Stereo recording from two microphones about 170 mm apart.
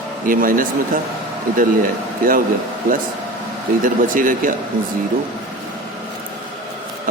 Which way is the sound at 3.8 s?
55° right (ahead or behind).